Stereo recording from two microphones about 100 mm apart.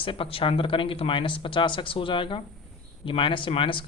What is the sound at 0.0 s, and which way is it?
A woman's voice, 60° left (ahead or behind).